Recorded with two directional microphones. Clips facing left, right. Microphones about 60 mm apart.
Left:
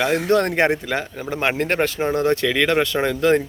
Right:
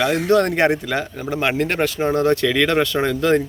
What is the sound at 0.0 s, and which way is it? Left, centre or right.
Speech, left.